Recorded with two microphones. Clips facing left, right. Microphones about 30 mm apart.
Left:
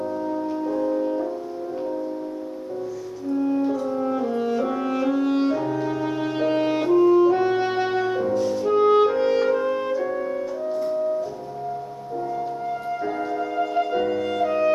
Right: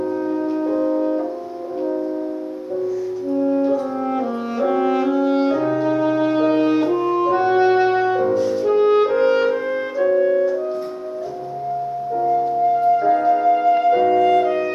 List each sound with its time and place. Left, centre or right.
0.4 s music: right
3.5 s french horn: centre
4.0 s french horn: right
5.0 s music: centre
7.0 s clarinet: centre
8.4 s music: centre
13.0 s music: centre